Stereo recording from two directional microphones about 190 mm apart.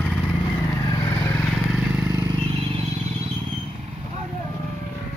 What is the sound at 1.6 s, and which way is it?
Vehicle, 5° right (ahead or behind).